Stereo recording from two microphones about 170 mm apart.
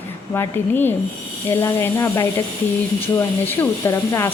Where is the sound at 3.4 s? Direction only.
15° left (ahead or behind).